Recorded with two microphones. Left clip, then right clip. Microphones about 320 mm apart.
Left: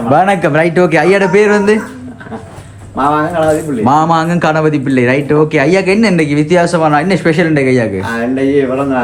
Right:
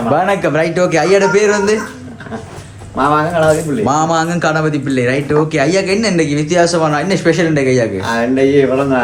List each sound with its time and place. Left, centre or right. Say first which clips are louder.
0.1 s a man's voice: left 4 dB; left
3.0 s speech: left 1 dB; centre
3.8 s a man's voice: left 4 dB; left
8.0 s speech: right 1 dB; centre